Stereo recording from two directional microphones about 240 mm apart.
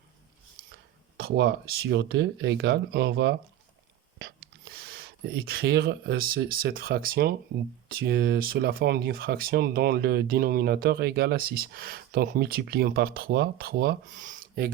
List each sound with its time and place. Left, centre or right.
1.1 s speech: right